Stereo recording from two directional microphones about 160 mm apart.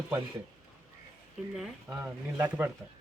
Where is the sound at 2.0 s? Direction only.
10° right (ahead or behind).